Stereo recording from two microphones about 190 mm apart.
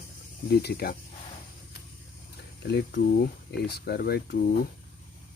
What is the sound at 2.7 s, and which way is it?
Speech, 60° left (ahead or behind).